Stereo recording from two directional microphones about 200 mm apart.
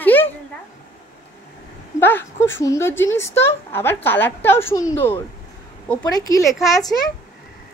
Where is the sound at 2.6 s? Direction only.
15° left (ahead or behind).